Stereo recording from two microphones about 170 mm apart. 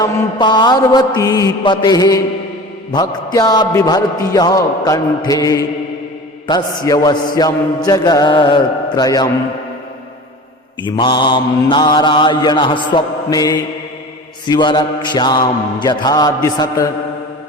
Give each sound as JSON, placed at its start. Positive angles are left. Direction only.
{"t": 0.0, "sound": "a man's voice", "side_deg": 25}
{"t": 10.8, "sound": "a man's voice", "side_deg": 25}